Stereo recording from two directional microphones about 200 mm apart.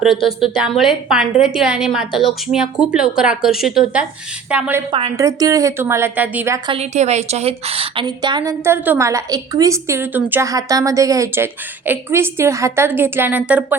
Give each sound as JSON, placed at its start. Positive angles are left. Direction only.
{"t": 0.5, "sound": "a woman's voice", "side_deg": -5}
{"t": 4.9, "sound": "a woman's voice", "side_deg": -25}
{"t": 6.7, "sound": "a woman's voice", "side_deg": -30}